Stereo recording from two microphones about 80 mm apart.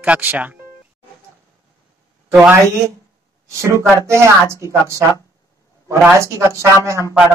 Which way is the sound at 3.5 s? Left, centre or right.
Right.